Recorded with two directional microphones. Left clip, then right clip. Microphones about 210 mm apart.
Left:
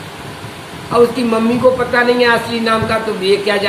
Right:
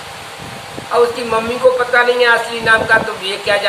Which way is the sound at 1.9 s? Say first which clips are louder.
Right 1 dB; 10° right (ahead or behind).